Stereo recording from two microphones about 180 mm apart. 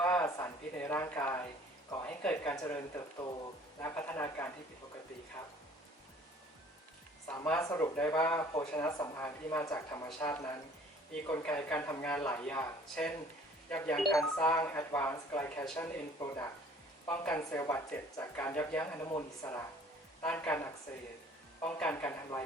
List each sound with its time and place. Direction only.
0.0 s a sound: 10° left (ahead or behind)
1.9 s speech: 10° left (ahead or behind)
7.3 s speech: 5° left (ahead or behind)
17.1 s speech: 10° left (ahead or behind)